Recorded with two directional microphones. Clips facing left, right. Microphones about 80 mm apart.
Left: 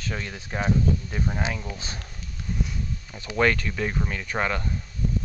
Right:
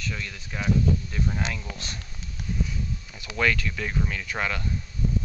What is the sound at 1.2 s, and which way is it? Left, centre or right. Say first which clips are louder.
Speech: left 1 dB; centre.